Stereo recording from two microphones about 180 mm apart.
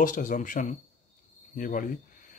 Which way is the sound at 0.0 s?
45° left (ahead or behind).